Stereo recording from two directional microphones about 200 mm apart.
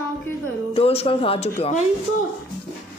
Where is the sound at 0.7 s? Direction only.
30° left (ahead or behind).